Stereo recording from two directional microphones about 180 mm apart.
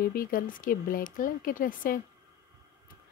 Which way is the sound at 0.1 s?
50° left (ahead or behind).